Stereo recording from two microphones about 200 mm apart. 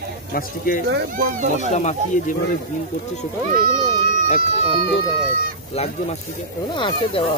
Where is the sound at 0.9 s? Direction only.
50° right (ahead or behind).